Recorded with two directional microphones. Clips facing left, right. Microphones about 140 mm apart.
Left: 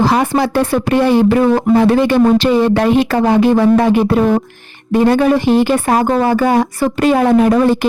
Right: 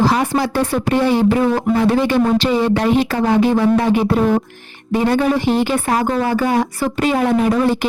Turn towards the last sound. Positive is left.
turn(degrees=50)  # may be behind; listen again after turning